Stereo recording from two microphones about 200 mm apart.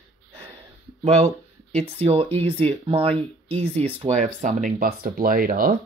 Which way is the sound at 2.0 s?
30° right (ahead or behind).